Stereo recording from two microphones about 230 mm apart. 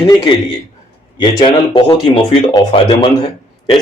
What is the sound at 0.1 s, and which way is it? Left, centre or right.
Speech, centre.